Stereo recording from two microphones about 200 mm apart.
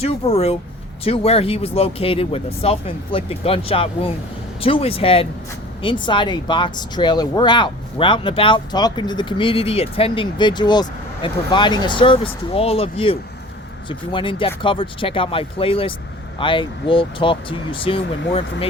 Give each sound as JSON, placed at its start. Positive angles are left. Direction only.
{"t": 0.0, "sound": "speech", "side_deg": 30}